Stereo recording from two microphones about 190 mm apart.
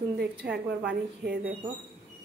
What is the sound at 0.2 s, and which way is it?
A woman's voice, 60° right (ahead or behind).